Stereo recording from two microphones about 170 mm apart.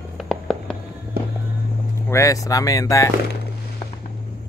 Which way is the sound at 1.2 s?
65° right (ahead or behind).